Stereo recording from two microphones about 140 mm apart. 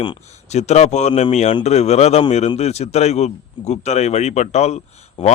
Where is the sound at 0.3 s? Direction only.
55° left (ahead or behind).